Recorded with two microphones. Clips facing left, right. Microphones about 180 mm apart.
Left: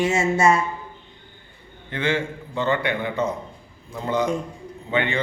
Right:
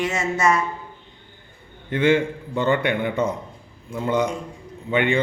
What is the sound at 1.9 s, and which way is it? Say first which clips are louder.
A man's voice: right 6 dB; 50° right (ahead or behind).